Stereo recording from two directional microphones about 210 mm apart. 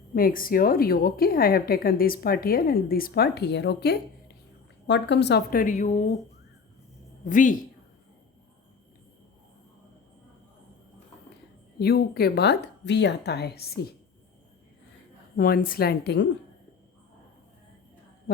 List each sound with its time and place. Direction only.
0.1 s a woman's voice: 45° left (ahead or behind)
7.3 s speech: 40° left (ahead or behind)
11.8 s a woman's voice: 50° left (ahead or behind)
15.4 s a woman's voice: 45° left (ahead or behind)